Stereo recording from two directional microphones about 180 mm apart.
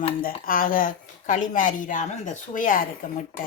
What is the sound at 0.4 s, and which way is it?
Speech, 50° left (ahead or behind).